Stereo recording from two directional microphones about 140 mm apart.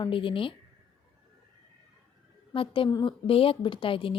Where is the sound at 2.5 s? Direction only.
40° left (ahead or behind).